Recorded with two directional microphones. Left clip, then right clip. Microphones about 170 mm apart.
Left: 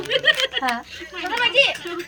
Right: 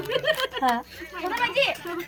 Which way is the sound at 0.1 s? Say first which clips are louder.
Left 6 dB; 65° right (ahead or behind).